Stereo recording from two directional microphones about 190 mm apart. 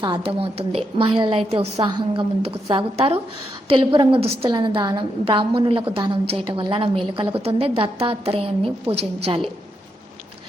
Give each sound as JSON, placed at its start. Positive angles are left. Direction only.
{"t": 0.0, "sound": "a woman's voice", "side_deg": -25}